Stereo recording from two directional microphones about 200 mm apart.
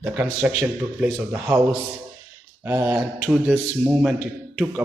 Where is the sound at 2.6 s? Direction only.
10° right (ahead or behind).